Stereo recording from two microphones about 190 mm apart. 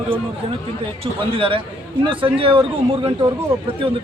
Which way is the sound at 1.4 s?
25° right (ahead or behind).